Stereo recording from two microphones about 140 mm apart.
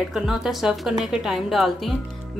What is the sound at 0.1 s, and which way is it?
A woman's voice, 5° right (ahead or behind).